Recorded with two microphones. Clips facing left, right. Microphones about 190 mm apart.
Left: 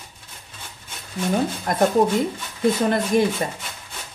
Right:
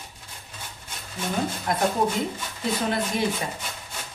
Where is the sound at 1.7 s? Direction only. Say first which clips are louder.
Left 1 dB; 45° left (ahead or behind).